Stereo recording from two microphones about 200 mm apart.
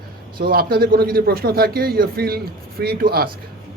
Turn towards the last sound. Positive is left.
turn(degrees=-50)  # may be behind; listen again after turning